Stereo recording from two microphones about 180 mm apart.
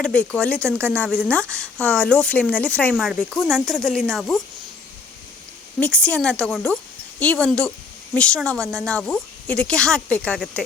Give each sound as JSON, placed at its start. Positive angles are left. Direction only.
{"t": 0.0, "sound": "a woman's voice", "side_deg": 5}
{"t": 5.8, "sound": "a woman's voice", "side_deg": 5}